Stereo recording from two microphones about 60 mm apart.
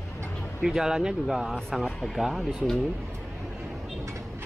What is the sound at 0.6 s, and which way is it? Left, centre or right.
Speech, centre.